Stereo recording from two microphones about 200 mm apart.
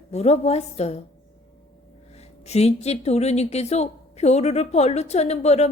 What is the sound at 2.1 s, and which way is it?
Speech, 30° left (ahead or behind).